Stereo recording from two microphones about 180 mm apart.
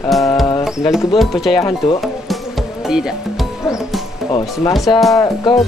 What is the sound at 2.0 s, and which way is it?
Music, centre (ahead or behind).